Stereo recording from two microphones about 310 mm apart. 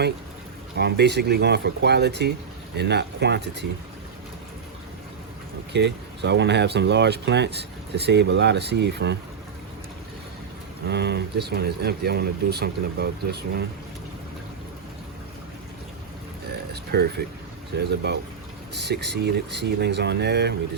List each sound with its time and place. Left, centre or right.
0.8 s speech: right
5.7 s speech: right
10.8 s speech: right
16.9 s speech: right